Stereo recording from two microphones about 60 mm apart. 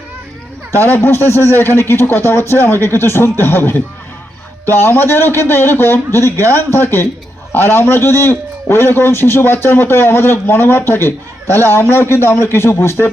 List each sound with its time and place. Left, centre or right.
0.8 s a man's voice: left